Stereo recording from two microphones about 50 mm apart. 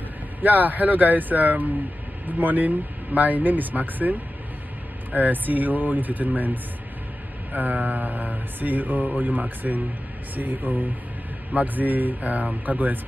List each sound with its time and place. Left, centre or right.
0.4 s speech: right